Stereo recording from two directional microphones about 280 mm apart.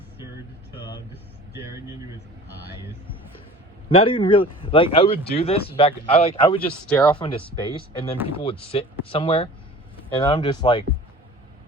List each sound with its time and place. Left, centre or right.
1.1 s speech: centre
3.8 s speech: centre
6.6 s speech: centre
7.2 s speech: centre